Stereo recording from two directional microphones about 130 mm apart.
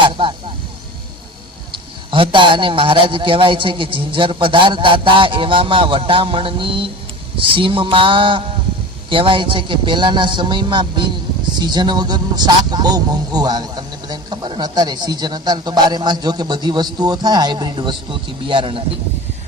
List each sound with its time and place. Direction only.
0.0 s speech: 40° right (ahead or behind)
2.0 s speech: 40° right (ahead or behind)